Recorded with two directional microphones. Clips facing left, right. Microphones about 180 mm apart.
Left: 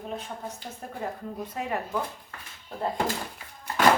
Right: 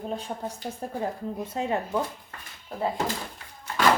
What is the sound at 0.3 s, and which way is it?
Speech, 30° right (ahead or behind).